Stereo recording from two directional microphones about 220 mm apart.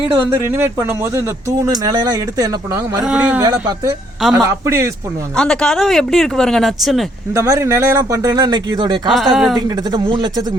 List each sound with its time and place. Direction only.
0.3 s speech: 10° right (ahead or behind)
3.0 s speech: 5° right (ahead or behind)
3.4 s speech: 15° right (ahead or behind)
5.4 s speech: 5° left (ahead or behind)
7.3 s speech: 15° right (ahead or behind)
9.0 s speech: centre (ahead or behind)
9.6 s speech: 20° right (ahead or behind)